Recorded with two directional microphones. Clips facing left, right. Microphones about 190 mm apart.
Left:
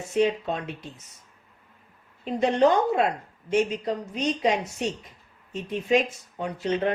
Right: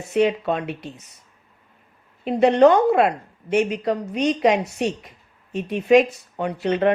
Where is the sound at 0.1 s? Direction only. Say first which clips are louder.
Right 4 dB; 65° right (ahead or behind).